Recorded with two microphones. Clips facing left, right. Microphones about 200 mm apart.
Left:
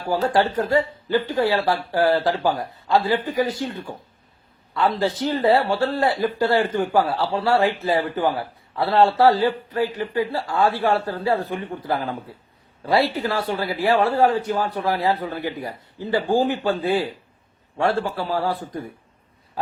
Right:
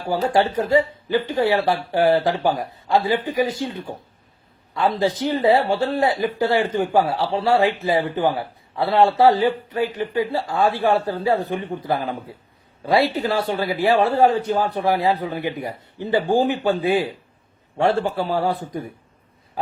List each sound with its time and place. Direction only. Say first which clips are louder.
0.2 s speech: right 2 dB; 20° right (ahead or behind)
4.7 s speech: right 1 dB; 20° right (ahead or behind)
12.9 s speech: right 2 dB; 20° right (ahead or behind)